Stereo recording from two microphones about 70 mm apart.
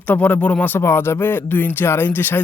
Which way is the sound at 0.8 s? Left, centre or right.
Left.